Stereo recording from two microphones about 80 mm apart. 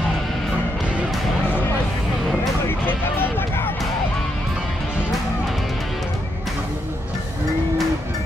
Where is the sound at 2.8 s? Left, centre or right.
Left.